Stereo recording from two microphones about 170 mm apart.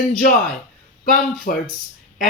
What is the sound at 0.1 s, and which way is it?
Speech, 55° left (ahead or behind).